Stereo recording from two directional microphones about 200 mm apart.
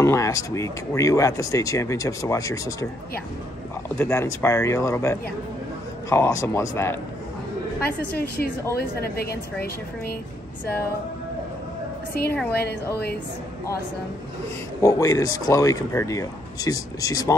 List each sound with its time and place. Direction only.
0.0 s speech: 15° left (ahead or behind)
4.0 s speech: 15° left (ahead or behind)
8.7 s a woman's voice: 50° left (ahead or behind)
12.1 s a woman's voice: 50° left (ahead or behind)
14.8 s speech: 15° left (ahead or behind)